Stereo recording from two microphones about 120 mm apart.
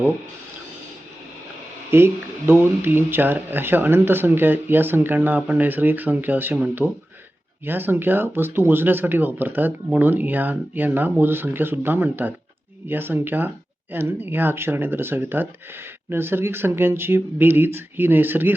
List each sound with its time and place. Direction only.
1.9 s speech: 20° right (ahead or behind)